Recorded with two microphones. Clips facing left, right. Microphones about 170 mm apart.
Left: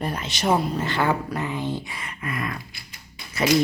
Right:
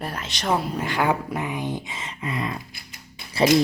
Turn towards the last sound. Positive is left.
turn(degrees=-30)  # may be behind; listen again after turning